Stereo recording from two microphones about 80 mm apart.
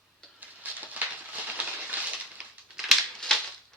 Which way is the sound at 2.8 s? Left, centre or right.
Centre.